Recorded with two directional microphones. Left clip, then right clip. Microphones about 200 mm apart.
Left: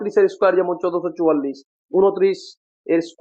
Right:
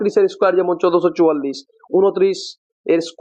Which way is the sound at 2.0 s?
30° right (ahead or behind).